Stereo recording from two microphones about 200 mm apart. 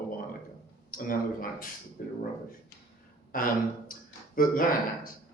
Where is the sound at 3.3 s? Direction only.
45° left (ahead or behind).